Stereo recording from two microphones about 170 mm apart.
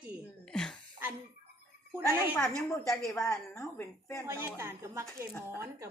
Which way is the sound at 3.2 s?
20° left (ahead or behind).